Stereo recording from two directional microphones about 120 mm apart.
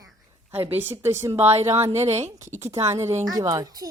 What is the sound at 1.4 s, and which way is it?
A woman's voice, 60° right (ahead or behind).